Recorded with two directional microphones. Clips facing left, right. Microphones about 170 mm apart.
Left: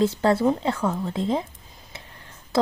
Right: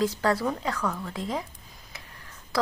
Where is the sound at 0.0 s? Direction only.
25° left (ahead or behind).